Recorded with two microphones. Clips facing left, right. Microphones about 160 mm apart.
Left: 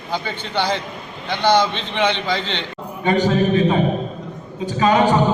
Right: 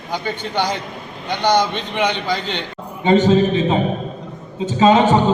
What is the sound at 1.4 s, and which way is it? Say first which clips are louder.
Speech: even; 15° right (ahead or behind).